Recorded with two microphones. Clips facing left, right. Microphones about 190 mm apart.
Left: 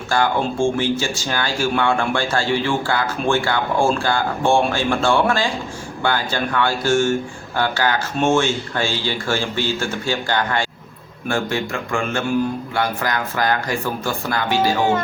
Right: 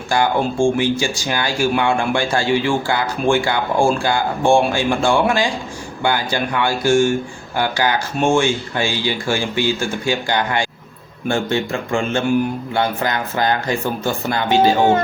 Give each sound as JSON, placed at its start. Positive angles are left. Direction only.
{"t": 0.1, "sound": "speech", "side_deg": -15}
{"t": 11.3, "sound": "speech", "side_deg": -25}